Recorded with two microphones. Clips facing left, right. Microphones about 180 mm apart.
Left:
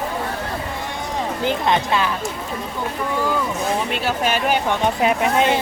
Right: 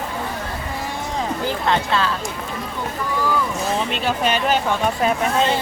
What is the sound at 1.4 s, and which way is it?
Speech, 20° left (ahead or behind).